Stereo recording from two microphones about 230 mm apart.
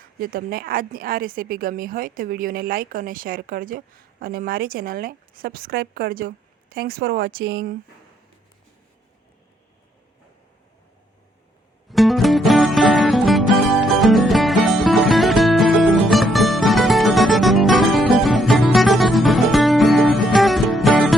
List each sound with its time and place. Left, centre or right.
0.2 s a woman's voice: right
11.9 s music: centre